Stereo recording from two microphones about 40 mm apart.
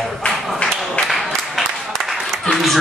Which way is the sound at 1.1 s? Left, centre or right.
Centre.